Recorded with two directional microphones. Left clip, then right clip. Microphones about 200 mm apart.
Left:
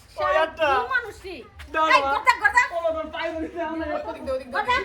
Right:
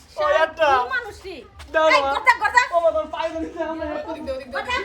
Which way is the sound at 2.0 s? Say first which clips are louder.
Right 2 dB; 10° right (ahead or behind).